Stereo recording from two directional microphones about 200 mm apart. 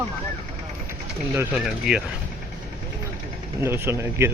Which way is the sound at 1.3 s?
5° right (ahead or behind).